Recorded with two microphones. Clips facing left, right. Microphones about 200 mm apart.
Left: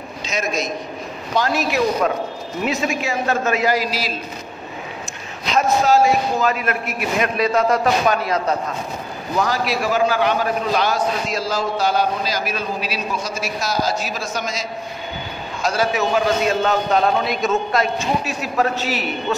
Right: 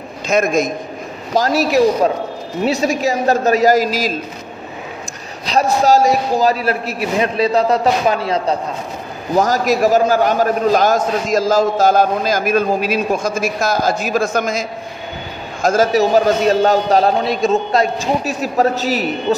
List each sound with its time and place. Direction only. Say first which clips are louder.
0.3 s a man's voice: right 9 dB; 55° right (ahead or behind)
1.3 s a man's voice: right 6 dB; 40° right (ahead or behind)
5.4 s a man's voice: right 3 dB; 35° right (ahead or behind)
9.3 s a man's voice: right 6 dB; 45° right (ahead or behind)